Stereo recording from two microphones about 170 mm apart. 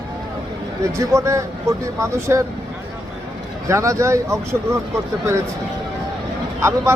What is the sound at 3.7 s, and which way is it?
Speech, 15° right (ahead or behind).